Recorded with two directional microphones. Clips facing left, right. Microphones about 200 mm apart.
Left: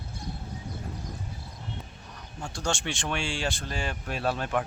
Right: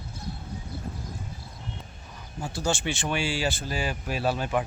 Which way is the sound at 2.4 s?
5° right (ahead or behind).